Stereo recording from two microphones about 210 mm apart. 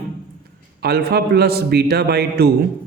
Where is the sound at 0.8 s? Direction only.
50° right (ahead or behind).